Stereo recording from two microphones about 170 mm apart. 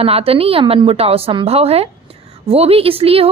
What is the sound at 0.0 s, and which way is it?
A woman's voice, 35° right (ahead or behind).